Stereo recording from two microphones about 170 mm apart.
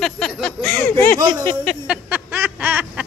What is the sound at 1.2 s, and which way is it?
Speech, 25° right (ahead or behind).